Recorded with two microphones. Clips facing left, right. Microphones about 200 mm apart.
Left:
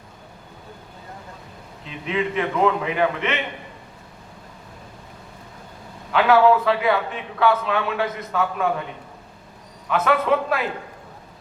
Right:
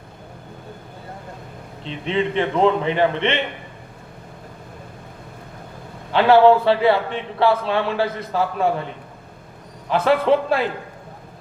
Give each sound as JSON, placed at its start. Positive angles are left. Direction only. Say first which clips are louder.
{"t": 1.8, "sound": "a man's voice", "louder": "right 3 dB", "side_deg": -30}
{"t": 6.1, "sound": "a man's voice", "louder": "right 3 dB", "side_deg": -30}
{"t": 9.9, "sound": "a man's voice", "louder": "right 3 dB", "side_deg": -30}